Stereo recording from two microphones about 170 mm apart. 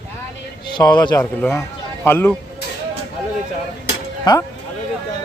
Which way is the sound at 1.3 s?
5° left (ahead or behind).